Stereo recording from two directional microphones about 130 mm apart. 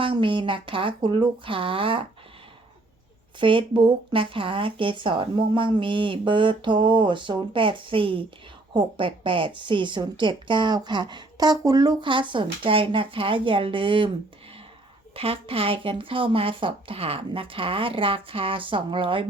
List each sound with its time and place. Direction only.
0.0 s speech: 40° right (ahead or behind)
3.4 s speech: 40° right (ahead or behind)
15.1 s speech: 45° right (ahead or behind)